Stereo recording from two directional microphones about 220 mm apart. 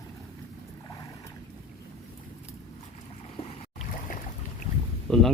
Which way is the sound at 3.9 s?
40° left (ahead or behind).